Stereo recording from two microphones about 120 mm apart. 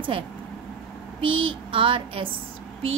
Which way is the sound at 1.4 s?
45° right (ahead or behind).